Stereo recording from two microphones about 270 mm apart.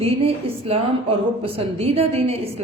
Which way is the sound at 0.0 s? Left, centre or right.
Right.